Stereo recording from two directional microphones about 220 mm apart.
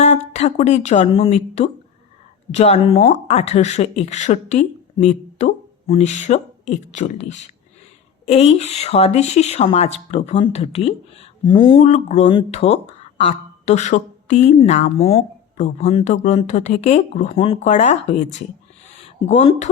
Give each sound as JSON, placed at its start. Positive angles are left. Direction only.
{"t": 0.0, "sound": "speech", "side_deg": 30}
{"t": 8.3, "sound": "speech", "side_deg": 30}
{"t": 19.0, "sound": "speech", "side_deg": 25}